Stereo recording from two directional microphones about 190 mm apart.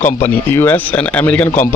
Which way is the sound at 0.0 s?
10° left (ahead or behind).